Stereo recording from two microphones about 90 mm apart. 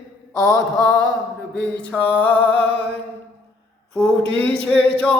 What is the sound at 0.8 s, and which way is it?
A capella, 10° left (ahead or behind).